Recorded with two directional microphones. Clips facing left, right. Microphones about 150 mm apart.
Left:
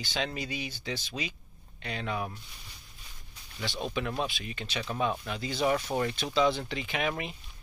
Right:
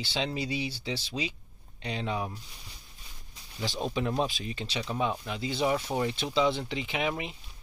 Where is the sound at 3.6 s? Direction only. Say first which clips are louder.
Right 2 dB; 35° right (ahead or behind).